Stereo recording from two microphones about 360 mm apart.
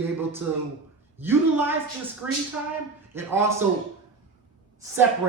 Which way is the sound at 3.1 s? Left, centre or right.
Centre.